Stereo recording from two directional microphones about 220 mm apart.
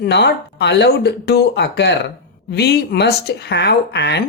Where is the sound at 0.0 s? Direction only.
50° left (ahead or behind).